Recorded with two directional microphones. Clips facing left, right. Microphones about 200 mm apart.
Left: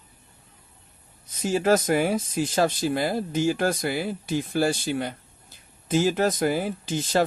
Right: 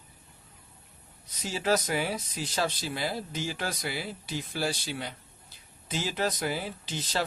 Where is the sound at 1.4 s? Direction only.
50° left (ahead or behind).